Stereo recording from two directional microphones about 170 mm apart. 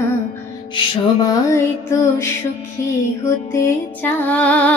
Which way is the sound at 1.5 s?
15° left (ahead or behind).